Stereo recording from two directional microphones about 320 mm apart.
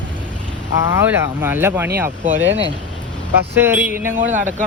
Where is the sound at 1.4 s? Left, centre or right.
Centre.